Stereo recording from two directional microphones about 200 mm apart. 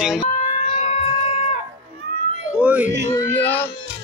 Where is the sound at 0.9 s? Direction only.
30° left (ahead or behind).